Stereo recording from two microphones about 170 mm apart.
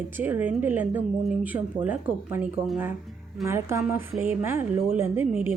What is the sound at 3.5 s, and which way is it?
Speech, 15° right (ahead or behind).